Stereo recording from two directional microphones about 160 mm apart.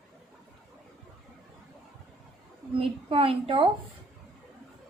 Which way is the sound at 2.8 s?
35° right (ahead or behind).